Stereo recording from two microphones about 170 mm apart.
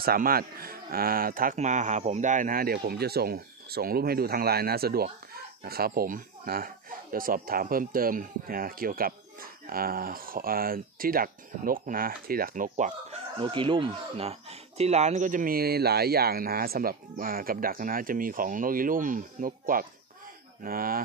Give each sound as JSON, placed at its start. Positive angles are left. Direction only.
{"t": 0.0, "sound": "speech", "side_deg": -60}
{"t": 13.4, "sound": "speech", "side_deg": -30}